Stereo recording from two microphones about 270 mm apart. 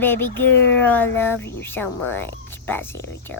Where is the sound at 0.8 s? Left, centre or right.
Centre.